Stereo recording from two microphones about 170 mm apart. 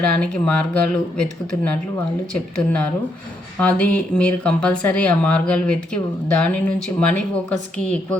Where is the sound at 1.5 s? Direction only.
30° left (ahead or behind).